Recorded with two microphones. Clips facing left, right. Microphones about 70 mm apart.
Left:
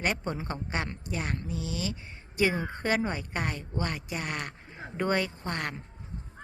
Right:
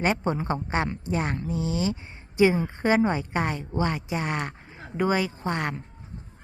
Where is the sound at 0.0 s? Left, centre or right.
Right.